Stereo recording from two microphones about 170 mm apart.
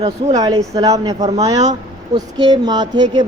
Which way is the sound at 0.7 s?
20° right (ahead or behind).